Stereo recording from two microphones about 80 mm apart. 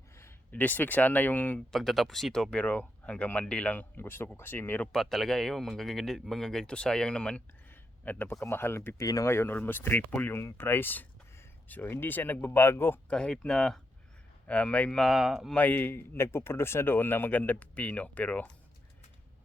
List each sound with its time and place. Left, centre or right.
0.5 s speech: left
1.7 s speech: centre; by 4.9 s left
4.9 s speech: centre
8.0 s speech: left
8.3 s speech: left
13.1 s speech: centre
15.1 s speech: centre
15.5 s speech: left